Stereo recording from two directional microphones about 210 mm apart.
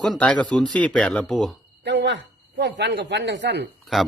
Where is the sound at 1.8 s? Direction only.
55° right (ahead or behind).